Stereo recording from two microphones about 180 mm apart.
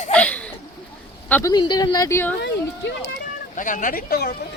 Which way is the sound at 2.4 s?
80° left.